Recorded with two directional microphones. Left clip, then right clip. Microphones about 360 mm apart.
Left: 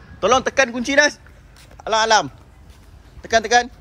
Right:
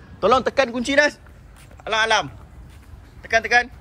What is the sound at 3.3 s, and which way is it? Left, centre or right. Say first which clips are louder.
Speech: left 2 dB; centre.